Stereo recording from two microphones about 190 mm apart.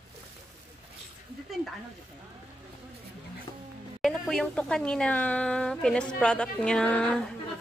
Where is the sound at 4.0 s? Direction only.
5° left (ahead or behind).